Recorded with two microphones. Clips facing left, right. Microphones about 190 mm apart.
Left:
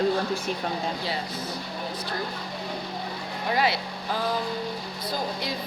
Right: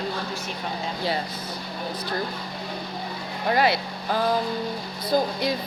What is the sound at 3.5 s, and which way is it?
Speech, 50° right (ahead or behind).